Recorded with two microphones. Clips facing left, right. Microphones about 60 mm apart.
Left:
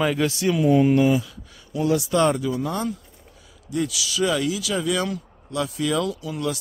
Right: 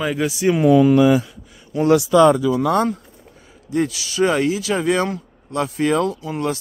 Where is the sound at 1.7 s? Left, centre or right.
Right.